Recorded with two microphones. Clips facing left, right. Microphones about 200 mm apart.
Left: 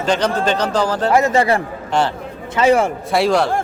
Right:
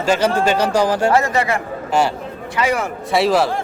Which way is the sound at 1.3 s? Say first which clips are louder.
Left 3 dB; 30° left (ahead or behind).